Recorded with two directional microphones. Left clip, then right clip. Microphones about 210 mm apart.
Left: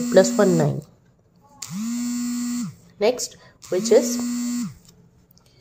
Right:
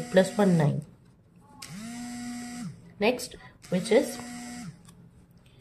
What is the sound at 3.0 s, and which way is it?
Speech, 25° left (ahead or behind).